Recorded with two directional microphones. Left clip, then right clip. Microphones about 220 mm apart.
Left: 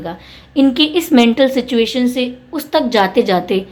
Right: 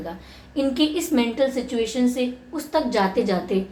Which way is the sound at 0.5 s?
45° left (ahead or behind).